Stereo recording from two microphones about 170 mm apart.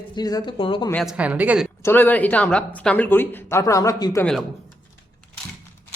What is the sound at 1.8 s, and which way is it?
Speech, 10° left (ahead or behind).